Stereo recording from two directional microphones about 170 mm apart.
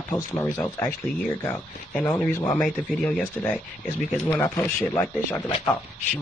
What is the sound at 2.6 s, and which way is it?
Speech, 5° left (ahead or behind).